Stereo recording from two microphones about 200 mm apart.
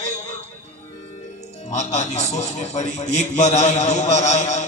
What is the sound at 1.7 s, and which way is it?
A man's voice, 35° left (ahead or behind).